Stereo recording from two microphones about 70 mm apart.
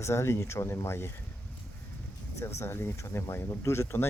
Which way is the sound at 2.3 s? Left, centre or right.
Left.